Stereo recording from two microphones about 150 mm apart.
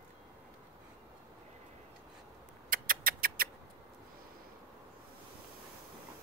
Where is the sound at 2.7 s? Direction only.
70° right (ahead or behind).